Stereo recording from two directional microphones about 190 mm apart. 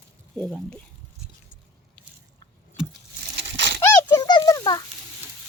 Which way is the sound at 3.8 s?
15° left (ahead or behind).